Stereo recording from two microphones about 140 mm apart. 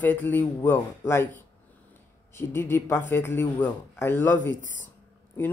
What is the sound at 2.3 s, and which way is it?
A man's voice, 15° left (ahead or behind).